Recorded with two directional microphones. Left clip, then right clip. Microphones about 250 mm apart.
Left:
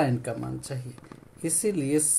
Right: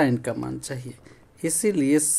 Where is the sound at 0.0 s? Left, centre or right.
Right.